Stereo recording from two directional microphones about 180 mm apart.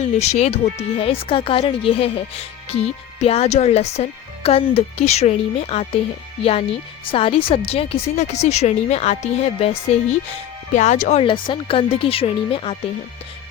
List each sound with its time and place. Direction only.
0.0 s speech: 40° left (ahead or behind)
10.8 s speech: 40° left (ahead or behind)
11.2 s speech: 30° left (ahead or behind)